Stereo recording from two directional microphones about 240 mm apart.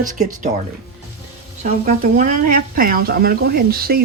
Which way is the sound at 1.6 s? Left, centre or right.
Right.